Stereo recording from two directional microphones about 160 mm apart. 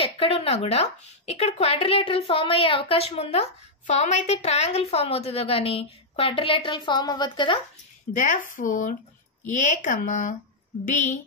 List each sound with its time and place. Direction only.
0.0 s speech: 40° left (ahead or behind)
8.1 s speech: 55° left (ahead or behind)